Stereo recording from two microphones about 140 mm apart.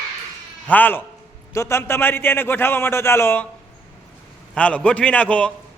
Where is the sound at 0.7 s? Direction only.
15° left (ahead or behind).